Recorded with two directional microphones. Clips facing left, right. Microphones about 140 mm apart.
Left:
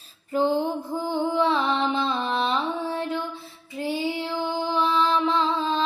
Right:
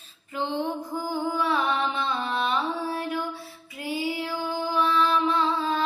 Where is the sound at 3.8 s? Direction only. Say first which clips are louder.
Left 2 dB; 25° left (ahead or behind).